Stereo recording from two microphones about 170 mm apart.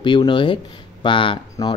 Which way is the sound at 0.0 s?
30° left (ahead or behind).